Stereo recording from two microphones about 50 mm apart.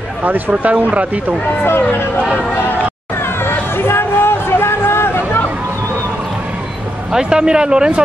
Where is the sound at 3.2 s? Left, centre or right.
Left.